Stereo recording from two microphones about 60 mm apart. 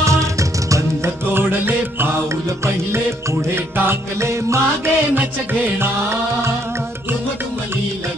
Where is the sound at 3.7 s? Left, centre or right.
Right.